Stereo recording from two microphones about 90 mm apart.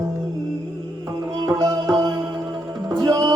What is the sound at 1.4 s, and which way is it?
Music, 45° right (ahead or behind).